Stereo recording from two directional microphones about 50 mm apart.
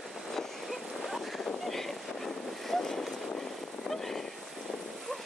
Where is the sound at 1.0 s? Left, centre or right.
Centre.